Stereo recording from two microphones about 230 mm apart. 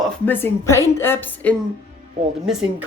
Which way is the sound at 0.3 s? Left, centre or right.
Centre.